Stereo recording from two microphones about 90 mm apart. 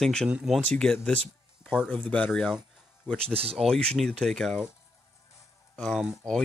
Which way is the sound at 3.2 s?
90° right.